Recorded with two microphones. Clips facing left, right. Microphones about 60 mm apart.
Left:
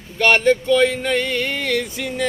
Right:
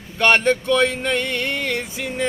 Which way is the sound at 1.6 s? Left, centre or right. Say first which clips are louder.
Left 3 dB; right.